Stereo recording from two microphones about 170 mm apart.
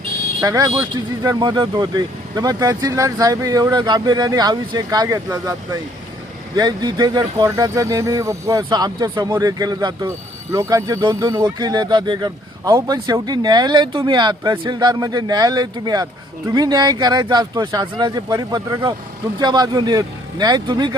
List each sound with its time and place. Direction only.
0.4 s speech: 20° right (ahead or behind)